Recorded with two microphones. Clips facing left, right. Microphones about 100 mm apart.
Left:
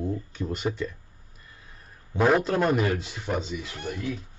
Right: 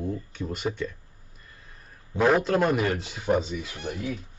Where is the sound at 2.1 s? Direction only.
Centre (ahead or behind).